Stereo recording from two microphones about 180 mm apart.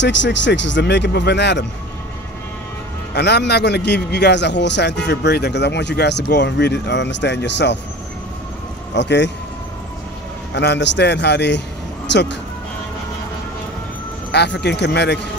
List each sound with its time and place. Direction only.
0.0 s a man's voice: 80° left
3.2 s a man's voice: 70° left (ahead or behind)
8.9 s a man's voice: 75° left (ahead or behind)
10.5 s a man's voice: 75° left (ahead or behind)
14.3 s a man's voice: 65° left (ahead or behind)